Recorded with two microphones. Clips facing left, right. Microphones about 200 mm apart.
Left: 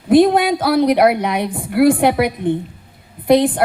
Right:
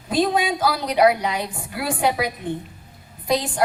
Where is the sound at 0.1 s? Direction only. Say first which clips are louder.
Left 9 dB; 55° left (ahead or behind).